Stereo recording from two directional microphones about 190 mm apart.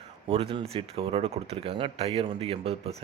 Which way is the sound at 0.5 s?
30° right (ahead or behind).